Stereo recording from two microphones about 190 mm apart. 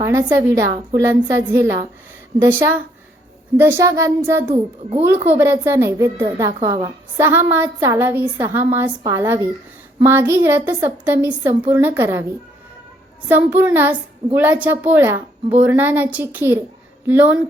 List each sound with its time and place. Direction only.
0.0 s a woman's voice: 15° right (ahead or behind)
4.5 s a child's voice: 30° right (ahead or behind)
5.4 s a woman's voice: 15° right (ahead or behind)
13.2 s a woman's voice: 10° right (ahead or behind)